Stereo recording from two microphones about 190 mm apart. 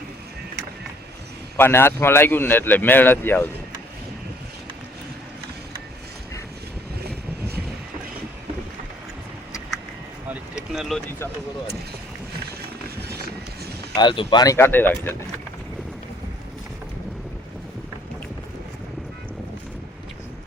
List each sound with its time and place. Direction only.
1.5 s speech: 10° left (ahead or behind)
7.0 s vehicle: 55° right (ahead or behind)
10.7 s speech: centre (ahead or behind)
13.0 s run: 55° right (ahead or behind)
13.9 s speech: 25° left (ahead or behind)